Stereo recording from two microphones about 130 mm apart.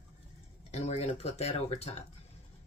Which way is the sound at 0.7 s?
55° left (ahead or behind).